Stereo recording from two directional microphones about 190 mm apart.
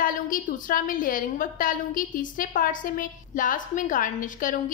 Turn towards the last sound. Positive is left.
turn(degrees=45)  # may be behind; listen again after turning